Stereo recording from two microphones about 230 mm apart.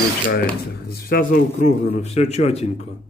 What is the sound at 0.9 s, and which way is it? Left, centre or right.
A man's voice, left.